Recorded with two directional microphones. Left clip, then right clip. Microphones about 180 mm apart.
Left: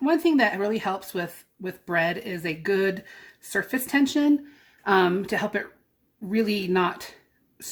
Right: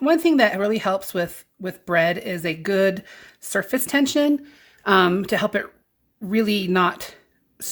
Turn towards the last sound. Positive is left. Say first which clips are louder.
# right 3 dB
turn(degrees=-50)  # may be behind; listen again after turning